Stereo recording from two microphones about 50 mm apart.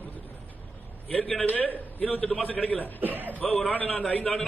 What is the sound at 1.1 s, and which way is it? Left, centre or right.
A man's voice, left.